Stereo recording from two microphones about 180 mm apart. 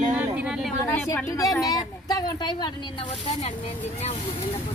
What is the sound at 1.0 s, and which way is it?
Speech, 20° left (ahead or behind).